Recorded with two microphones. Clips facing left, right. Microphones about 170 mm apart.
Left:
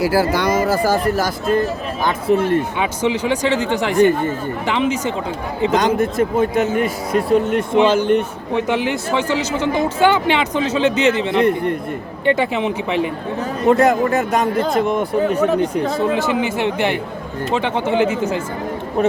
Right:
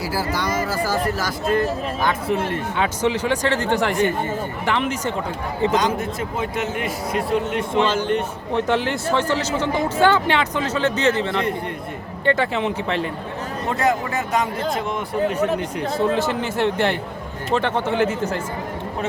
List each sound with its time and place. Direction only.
0.0 s speech: 70° left (ahead or behind)
2.3 s a man's voice: 45° left (ahead or behind)
2.8 s speech: 15° left (ahead or behind)
5.7 s a man's voice: 55° left (ahead or behind)
8.5 s speech: 10° left (ahead or behind)
13.7 s a man's voice: 50° left (ahead or behind)
16.0 s speech: 15° left (ahead or behind)